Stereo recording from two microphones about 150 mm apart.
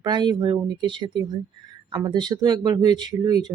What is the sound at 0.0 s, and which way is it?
Speech, 30° right (ahead or behind).